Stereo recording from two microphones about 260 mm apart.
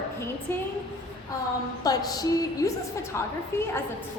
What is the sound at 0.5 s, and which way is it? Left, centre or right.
Speech, centre.